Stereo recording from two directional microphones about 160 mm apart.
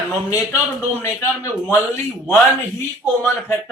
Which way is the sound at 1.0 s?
15° left (ahead or behind).